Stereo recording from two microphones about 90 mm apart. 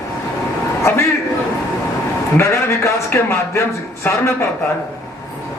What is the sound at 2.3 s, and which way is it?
A man's voice, 35° left (ahead or behind).